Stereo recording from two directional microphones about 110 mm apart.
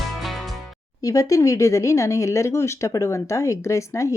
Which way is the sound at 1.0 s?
30° left (ahead or behind).